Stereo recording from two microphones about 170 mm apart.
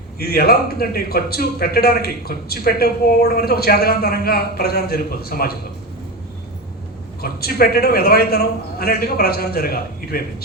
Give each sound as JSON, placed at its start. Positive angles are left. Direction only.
{"t": 0.2, "sound": "a man's voice", "side_deg": 65}
{"t": 7.2, "sound": "a man's voice", "side_deg": 65}